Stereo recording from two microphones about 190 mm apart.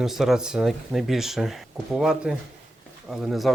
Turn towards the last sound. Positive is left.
turn(degrees=0)  # may be behind; listen again after turning